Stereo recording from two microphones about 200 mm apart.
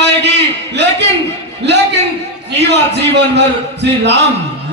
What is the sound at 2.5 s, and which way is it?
A man's voice, 60° right (ahead or behind).